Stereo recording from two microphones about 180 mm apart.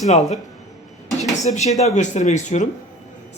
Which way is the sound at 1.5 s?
40° left (ahead or behind).